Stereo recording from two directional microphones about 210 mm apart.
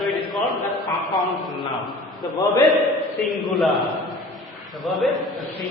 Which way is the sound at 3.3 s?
Centre (ahead or behind).